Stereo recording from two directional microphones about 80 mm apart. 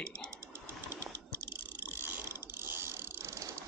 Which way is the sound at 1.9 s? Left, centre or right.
Right.